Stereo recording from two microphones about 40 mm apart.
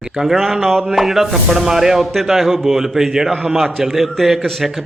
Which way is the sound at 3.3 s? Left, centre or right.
Right.